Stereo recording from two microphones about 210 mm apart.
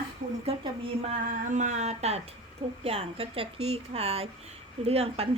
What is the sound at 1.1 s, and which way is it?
A woman's voice, 35° right (ahead or behind).